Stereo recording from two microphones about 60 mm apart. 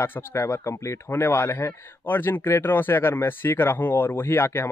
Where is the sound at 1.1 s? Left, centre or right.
Left.